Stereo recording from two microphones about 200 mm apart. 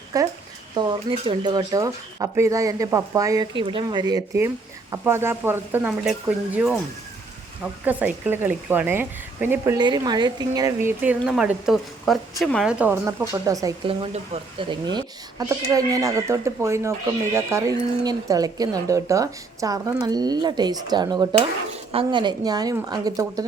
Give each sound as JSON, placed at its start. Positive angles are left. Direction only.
{"t": 0.1, "sound": "speech", "side_deg": -15}
{"t": 9.7, "sound": "a woman's voice", "side_deg": -20}
{"t": 12.8, "sound": "speech", "side_deg": -10}